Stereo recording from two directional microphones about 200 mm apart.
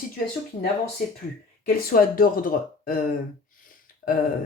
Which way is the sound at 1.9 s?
45° left (ahead or behind).